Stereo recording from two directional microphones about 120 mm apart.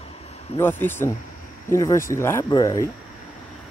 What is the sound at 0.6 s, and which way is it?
Speech, 20° left (ahead or behind).